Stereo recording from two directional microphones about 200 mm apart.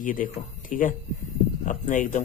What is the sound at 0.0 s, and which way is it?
Speech, 40° left (ahead or behind).